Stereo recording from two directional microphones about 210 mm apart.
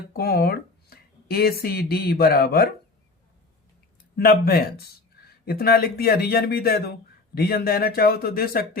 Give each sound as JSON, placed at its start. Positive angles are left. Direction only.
{"t": 0.1, "sound": "speech", "side_deg": 50}
{"t": 4.2, "sound": "a man's voice", "side_deg": 45}